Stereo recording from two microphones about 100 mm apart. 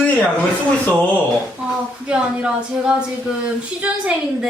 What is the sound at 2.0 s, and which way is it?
A woman's voice, 10° right (ahead or behind).